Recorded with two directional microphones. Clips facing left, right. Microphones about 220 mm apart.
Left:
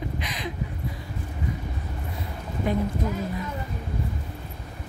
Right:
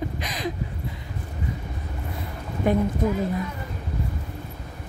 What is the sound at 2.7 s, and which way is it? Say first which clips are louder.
Speech: right 4 dB; 55° right (ahead or behind).